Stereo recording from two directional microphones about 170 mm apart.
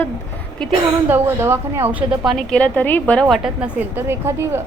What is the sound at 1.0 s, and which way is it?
A woman's voice, 10° right (ahead or behind).